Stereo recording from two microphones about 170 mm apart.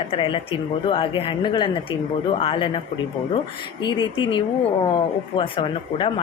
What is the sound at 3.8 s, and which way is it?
Speech, 25° left (ahead or behind).